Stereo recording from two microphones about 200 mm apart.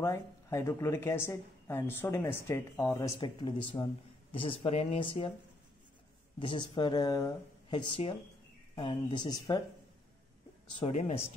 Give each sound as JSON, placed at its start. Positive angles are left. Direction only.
{"t": 0.0, "sound": "speech", "side_deg": 15}
{"t": 6.4, "sound": "speech", "side_deg": 25}
{"t": 10.8, "sound": "speech", "side_deg": 35}